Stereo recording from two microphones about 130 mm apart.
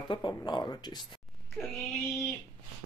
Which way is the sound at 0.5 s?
35° left (ahead or behind).